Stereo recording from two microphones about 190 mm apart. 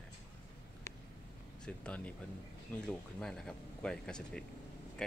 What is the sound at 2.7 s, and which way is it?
Speech, 5° left (ahead or behind).